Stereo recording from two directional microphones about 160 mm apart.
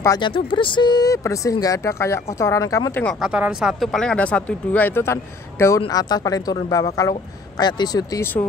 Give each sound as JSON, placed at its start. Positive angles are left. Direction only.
{"t": 0.0, "sound": "speech", "side_deg": 20}
{"t": 0.3, "sound": "speech", "side_deg": 30}
{"t": 3.2, "sound": "speech", "side_deg": -5}